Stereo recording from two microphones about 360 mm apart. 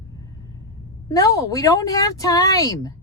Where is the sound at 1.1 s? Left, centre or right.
Centre.